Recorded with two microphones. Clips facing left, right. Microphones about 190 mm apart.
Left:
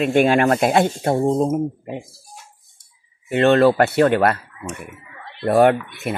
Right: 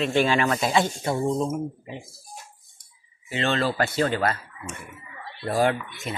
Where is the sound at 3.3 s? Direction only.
60° left (ahead or behind).